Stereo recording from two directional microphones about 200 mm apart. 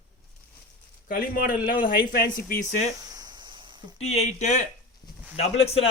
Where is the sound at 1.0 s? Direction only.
45° left (ahead or behind).